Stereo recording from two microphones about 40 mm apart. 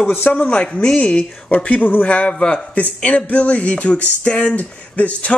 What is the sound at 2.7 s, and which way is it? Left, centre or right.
Speech, left.